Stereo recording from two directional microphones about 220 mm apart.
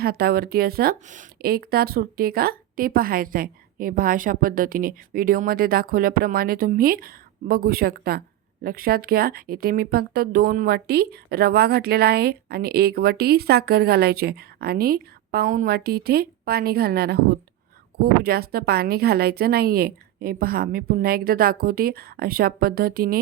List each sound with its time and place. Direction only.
0.0 s a woman's voice: 45° right (ahead or behind)